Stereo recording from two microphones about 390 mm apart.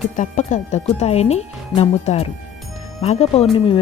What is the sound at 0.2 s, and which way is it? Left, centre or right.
Speech, centre.